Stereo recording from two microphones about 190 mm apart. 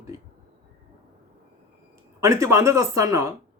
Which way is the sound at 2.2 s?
15° right (ahead or behind).